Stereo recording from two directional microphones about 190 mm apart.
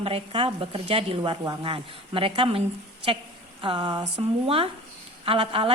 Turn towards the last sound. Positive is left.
turn(degrees=-30)  # may be behind; listen again after turning